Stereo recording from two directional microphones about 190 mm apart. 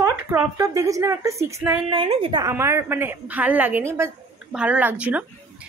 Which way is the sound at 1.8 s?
25° right (ahead or behind).